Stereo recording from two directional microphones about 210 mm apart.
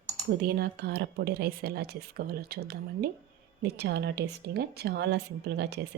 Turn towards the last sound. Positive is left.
turn(degrees=-50)  # may be behind; listen again after turning